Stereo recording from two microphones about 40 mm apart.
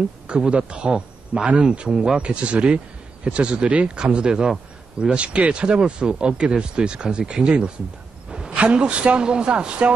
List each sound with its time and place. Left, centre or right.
0.5 s a man's voice: right
8.3 s a sound: centre
8.5 s speech: right